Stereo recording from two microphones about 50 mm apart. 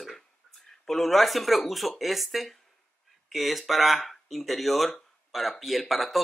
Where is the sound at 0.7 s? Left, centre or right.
Centre.